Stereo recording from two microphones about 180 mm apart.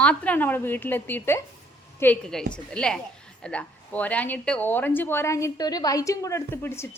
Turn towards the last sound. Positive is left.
turn(degrees=15)  # may be behind; listen again after turning